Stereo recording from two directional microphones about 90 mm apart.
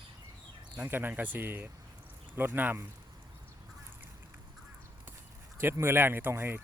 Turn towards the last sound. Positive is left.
turn(degrees=-25)  # may be behind; listen again after turning